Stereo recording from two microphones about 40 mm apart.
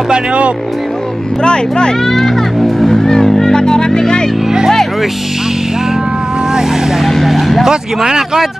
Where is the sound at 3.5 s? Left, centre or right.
Centre.